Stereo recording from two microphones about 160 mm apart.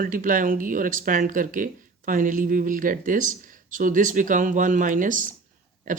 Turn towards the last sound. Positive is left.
turn(degrees=-55)  # may be behind; listen again after turning